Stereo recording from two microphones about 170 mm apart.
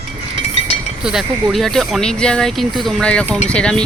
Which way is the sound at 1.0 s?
Centre (ahead or behind).